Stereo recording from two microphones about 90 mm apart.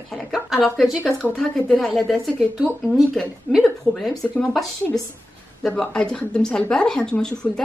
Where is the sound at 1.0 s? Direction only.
15° left (ahead or behind).